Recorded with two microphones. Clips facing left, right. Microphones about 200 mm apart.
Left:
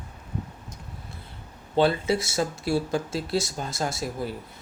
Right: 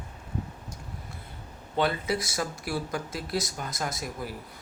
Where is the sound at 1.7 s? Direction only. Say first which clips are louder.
Left 5 dB; 30° left (ahead or behind).